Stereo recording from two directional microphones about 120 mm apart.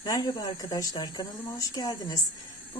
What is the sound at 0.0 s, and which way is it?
A woman's voice, 35° left (ahead or behind).